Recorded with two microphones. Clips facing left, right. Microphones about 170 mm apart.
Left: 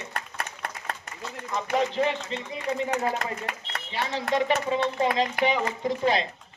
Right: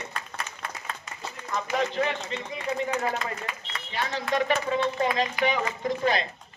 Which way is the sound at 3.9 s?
30° left (ahead or behind).